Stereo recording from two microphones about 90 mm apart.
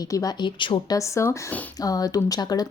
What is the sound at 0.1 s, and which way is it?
Speech, 45° left (ahead or behind).